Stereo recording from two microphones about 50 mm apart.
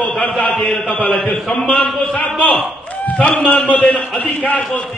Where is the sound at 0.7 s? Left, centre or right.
Left.